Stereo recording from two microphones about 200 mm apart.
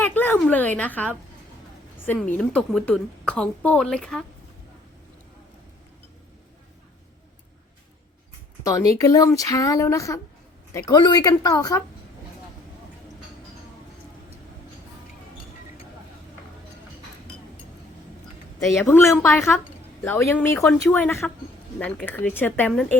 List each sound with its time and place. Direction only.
0.0 s a sound: 10° left (ahead or behind)
2.0 s a woman's voice: 10° left (ahead or behind)
8.6 s speech: 15° left (ahead or behind)
18.9 s speech: 15° left (ahead or behind)